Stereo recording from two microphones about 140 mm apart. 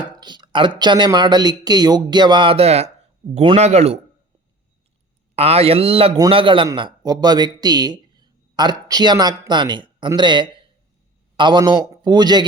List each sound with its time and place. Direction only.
0.0 s a sound: 30° right (ahead or behind)
0.8 s speech: 35° right (ahead or behind); by 4.0 s 50° right (ahead or behind)
5.4 s speech: 45° right (ahead or behind); by 12.5 s 30° right (ahead or behind)